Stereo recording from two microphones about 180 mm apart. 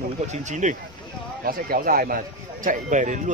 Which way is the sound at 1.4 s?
55° right (ahead or behind).